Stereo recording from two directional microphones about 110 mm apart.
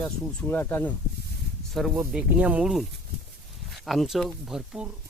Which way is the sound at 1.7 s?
Centre (ahead or behind).